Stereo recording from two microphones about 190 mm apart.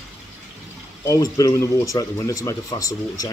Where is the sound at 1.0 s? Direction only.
15° left (ahead or behind).